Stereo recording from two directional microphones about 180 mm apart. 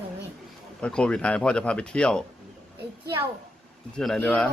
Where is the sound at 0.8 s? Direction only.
5° left (ahead or behind).